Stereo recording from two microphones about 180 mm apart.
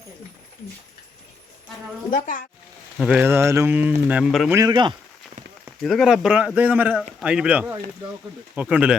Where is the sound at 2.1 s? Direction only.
45° left (ahead or behind).